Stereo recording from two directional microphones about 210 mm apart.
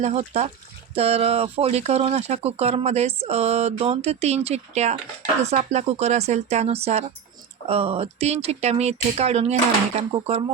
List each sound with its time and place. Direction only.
0.0 s speech: 30° right (ahead or behind)